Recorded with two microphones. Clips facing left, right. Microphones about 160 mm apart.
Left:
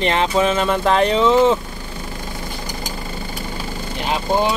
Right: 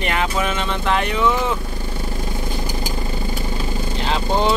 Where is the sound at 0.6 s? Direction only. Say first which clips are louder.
Left 5 dB; 40° left (ahead or behind); by 1.6 s 25° left (ahead or behind).